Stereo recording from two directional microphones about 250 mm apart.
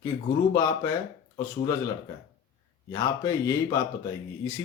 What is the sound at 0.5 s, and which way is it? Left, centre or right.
Speech, centre.